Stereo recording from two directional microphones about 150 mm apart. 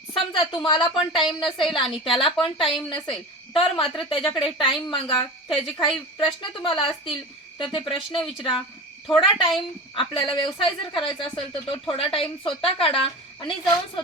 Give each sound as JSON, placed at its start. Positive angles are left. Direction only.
{"t": 0.1, "sound": "speech", "side_deg": 35}